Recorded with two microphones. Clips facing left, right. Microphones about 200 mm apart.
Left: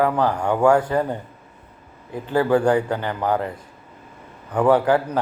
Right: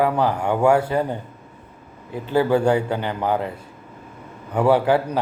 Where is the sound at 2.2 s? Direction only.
25° right (ahead or behind).